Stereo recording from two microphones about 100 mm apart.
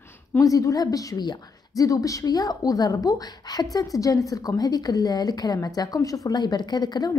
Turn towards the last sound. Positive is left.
turn(degrees=45)  # may be behind; listen again after turning